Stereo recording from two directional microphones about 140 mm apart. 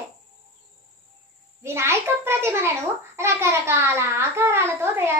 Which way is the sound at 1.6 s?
20° right (ahead or behind).